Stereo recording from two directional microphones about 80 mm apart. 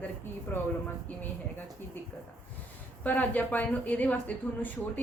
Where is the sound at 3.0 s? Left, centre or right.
Left.